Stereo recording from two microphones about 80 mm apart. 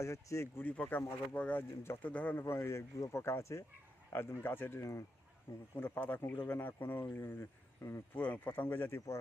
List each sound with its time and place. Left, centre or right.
0.0 s speech: left
0.6 s speech: centre
2.4 s speech: left
5.7 s speech: left
8.1 s speech: left